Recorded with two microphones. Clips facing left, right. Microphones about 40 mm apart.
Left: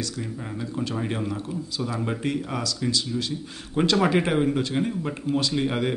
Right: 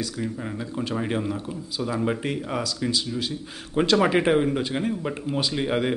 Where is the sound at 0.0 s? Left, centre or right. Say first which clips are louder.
Right 3 dB; centre.